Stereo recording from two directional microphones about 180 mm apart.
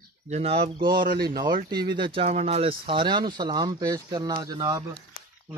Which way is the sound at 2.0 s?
30° right (ahead or behind).